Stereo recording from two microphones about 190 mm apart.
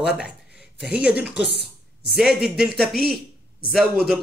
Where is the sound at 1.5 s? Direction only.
60° left (ahead or behind).